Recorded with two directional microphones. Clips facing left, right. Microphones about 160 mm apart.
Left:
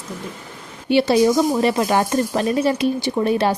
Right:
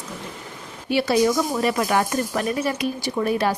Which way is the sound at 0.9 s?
25° left (ahead or behind).